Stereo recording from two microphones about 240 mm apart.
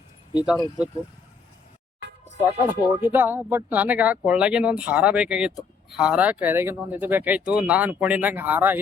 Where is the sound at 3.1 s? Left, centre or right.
Centre.